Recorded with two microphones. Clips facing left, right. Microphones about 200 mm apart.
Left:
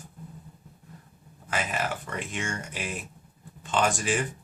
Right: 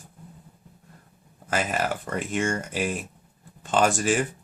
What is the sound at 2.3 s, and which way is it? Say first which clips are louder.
Speech: right 10 dB; 50° right (ahead or behind).